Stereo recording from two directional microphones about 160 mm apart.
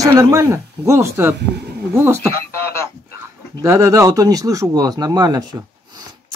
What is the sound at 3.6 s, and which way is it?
Speech, 20° right (ahead or behind).